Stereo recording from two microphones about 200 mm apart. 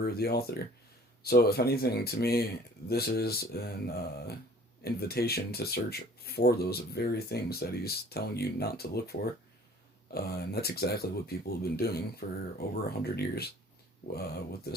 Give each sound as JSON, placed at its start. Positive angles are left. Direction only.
{"t": 0.0, "sound": "speech", "side_deg": 50}